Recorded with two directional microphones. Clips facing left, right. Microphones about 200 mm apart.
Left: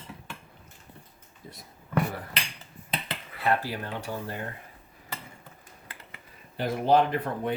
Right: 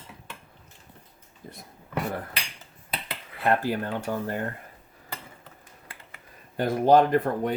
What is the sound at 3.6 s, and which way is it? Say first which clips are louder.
Speech: right 6 dB; 50° right (ahead or behind).